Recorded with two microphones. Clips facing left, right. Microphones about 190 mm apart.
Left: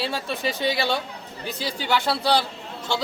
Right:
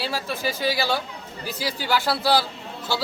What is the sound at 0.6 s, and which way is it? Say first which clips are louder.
Speech: even; 25° left (ahead or behind).